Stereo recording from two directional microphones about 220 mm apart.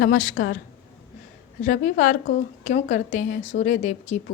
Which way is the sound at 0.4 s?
50° left (ahead or behind).